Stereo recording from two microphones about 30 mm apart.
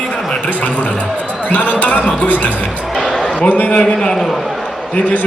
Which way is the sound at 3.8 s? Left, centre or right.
Left.